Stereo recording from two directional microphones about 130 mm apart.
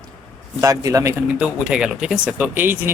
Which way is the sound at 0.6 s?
25° right (ahead or behind).